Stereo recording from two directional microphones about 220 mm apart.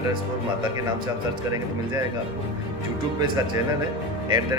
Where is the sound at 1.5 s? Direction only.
15° right (ahead or behind).